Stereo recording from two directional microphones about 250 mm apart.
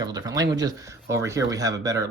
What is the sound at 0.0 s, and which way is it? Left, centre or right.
Speech, centre.